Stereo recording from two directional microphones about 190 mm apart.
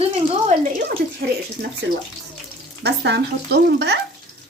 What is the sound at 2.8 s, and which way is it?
Speech, 60° right (ahead or behind).